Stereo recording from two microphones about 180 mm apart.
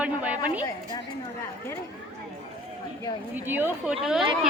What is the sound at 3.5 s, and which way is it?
A woman's voice, 10° right (ahead or behind).